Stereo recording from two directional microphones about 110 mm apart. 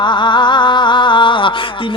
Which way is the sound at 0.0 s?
45° left (ahead or behind).